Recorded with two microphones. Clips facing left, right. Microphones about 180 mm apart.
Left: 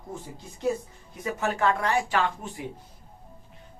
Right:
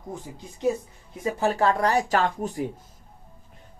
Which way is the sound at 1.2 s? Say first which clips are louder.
Right 3 dB; 30° right (ahead or behind).